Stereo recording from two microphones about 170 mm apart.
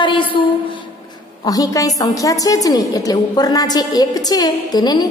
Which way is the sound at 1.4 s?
20° left (ahead or behind).